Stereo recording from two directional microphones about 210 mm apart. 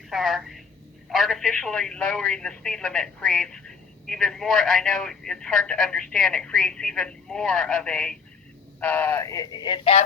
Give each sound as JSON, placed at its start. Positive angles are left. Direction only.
{"t": 0.1, "sound": "a woman's voice", "side_deg": 0}